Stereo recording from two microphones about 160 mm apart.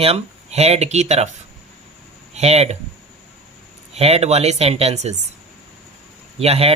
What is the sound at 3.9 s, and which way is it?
Speech, 40° right (ahead or behind).